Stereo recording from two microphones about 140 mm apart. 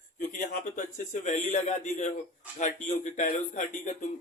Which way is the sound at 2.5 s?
60° left (ahead or behind).